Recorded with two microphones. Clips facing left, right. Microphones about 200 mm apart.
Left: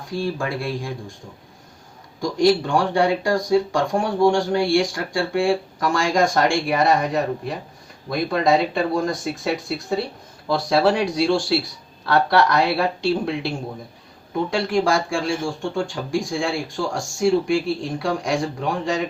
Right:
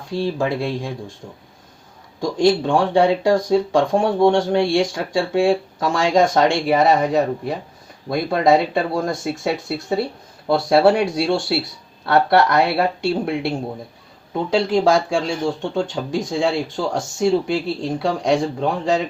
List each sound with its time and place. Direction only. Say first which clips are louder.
0.1 s speech: right 4 dB; 25° right (ahead or behind)
2.2 s speech: right 1 dB; 25° right (ahead or behind)
14.5 s speech: right 5 dB; 25° right (ahead or behind)